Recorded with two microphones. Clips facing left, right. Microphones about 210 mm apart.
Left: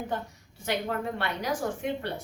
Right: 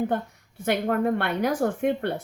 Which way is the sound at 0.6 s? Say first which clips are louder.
Right 7 dB; 55° right (ahead or behind).